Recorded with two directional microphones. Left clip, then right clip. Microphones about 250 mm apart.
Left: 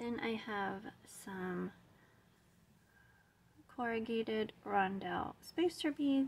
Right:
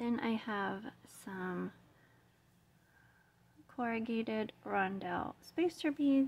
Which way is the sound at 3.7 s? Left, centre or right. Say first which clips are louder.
Even; centre.